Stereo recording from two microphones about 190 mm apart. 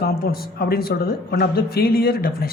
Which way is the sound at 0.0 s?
55° left (ahead or behind).